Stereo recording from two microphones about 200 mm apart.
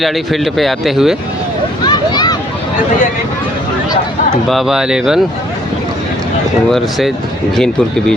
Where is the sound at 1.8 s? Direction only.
20° left (ahead or behind).